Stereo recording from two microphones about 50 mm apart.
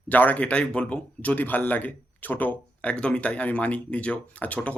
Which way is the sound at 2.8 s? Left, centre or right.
Left.